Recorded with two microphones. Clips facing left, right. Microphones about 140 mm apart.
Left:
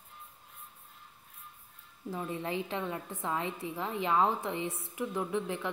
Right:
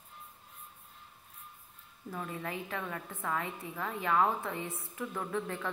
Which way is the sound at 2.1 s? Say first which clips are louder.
Left 4 dB; 20° left (ahead or behind).